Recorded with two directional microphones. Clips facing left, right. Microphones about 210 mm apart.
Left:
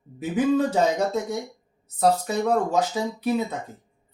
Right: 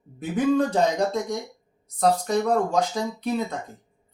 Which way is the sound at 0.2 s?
5° left (ahead or behind).